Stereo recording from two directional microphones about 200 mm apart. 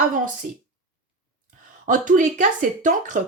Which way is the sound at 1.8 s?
40° right (ahead or behind).